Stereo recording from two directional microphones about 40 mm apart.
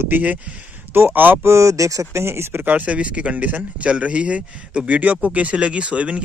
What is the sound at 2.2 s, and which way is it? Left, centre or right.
Speech, right.